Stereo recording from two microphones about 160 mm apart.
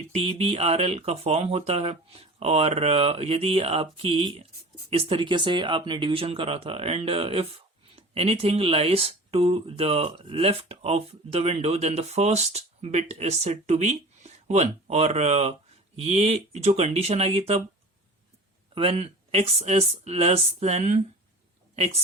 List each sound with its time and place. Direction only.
0.1 s speech: 40° right (ahead or behind)
18.7 s speech: 35° right (ahead or behind)